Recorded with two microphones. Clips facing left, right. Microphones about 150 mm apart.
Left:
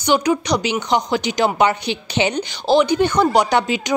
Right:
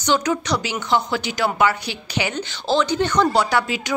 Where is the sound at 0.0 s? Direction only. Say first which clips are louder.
Left 3 dB; 15° left (ahead or behind).